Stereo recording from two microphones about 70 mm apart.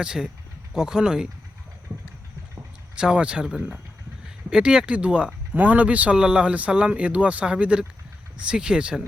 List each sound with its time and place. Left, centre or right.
0.0 s speech: centre
2.9 s speech: centre